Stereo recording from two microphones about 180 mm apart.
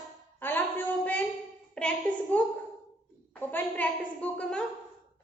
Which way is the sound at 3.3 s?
10° left (ahead or behind).